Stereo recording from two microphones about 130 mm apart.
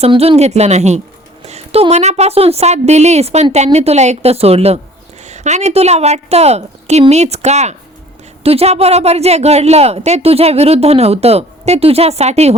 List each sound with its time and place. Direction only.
0.1 s a woman's voice: 50° right (ahead or behind)